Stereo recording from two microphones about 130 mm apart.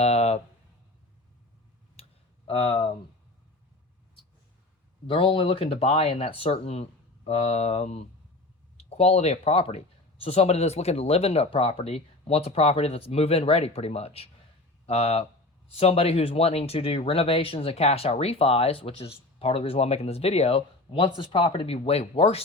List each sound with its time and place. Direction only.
0.0 s a sound: 55° left (ahead or behind)
2.5 s speech: 45° left (ahead or behind)
5.0 s speech: 45° left (ahead or behind)